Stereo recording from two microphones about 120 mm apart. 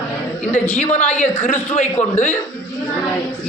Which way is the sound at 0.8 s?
75° left (ahead or behind).